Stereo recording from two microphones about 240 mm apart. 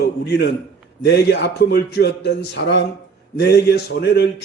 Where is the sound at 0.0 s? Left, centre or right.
Left.